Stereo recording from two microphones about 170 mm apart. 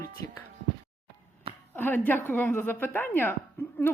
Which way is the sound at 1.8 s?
10° left (ahead or behind).